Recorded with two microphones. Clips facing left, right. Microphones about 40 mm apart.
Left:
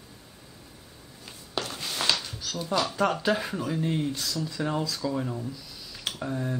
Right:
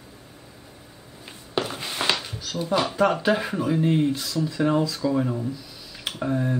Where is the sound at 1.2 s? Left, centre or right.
Centre.